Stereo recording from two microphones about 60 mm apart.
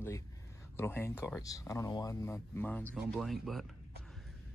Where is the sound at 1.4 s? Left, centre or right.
Left.